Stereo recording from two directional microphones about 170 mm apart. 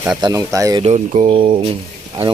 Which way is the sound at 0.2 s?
20° right (ahead or behind).